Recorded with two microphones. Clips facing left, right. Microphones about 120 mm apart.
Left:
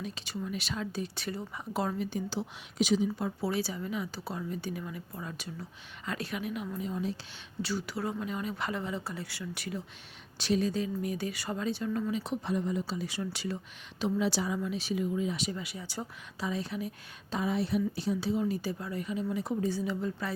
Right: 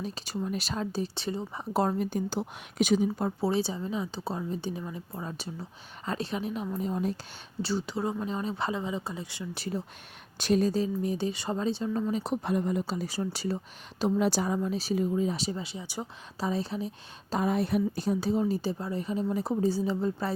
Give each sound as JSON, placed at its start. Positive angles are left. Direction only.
{"t": 0.0, "sound": "speech", "side_deg": -40}
{"t": 1.7, "sound": "a woman's voice", "side_deg": -40}
{"t": 3.4, "sound": "a woman's voice", "side_deg": -25}
{"t": 6.7, "sound": "a woman's voice", "side_deg": -45}
{"t": 7.6, "sound": "a woman's voice", "side_deg": -30}
{"t": 8.7, "sound": "a woman's voice", "side_deg": -20}
{"t": 10.3, "sound": "a woman's voice", "side_deg": -50}
{"t": 12.1, "sound": "a woman's voice", "side_deg": -40}
{"t": 12.9, "sound": "speech", "side_deg": -40}
{"t": 17.3, "sound": "speech", "side_deg": -50}